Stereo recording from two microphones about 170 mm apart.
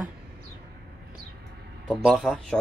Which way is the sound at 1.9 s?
Centre (ahead or behind).